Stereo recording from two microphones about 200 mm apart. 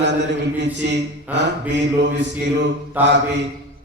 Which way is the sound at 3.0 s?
60° right (ahead or behind).